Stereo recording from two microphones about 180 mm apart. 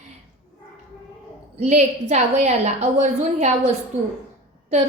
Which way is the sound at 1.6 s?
40° right (ahead or behind).